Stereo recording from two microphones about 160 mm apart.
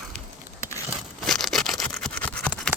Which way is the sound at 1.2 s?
Centre (ahead or behind).